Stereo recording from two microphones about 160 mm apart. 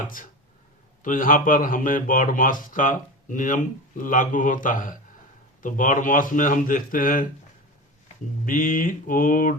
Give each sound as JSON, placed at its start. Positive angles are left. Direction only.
{"t": 1.0, "sound": "speech", "side_deg": 55}